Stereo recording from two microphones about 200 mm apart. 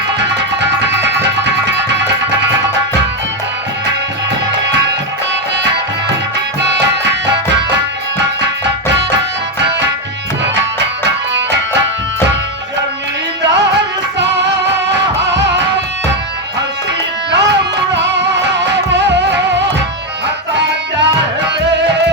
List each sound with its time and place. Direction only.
0.2 s music: 60° right (ahead or behind)
5.3 s music: 65° right (ahead or behind)
11.0 s music: 60° right (ahead or behind)
13.4 s music: 60° right (ahead or behind)
17.3 s music: 60° right (ahead or behind)